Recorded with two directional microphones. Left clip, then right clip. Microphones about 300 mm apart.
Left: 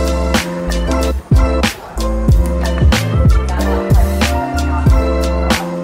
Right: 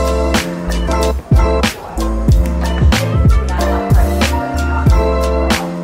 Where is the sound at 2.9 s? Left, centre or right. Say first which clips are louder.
Right 2 dB; centre.